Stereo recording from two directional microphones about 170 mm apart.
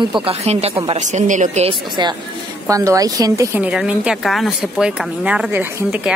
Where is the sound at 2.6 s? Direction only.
20° right (ahead or behind).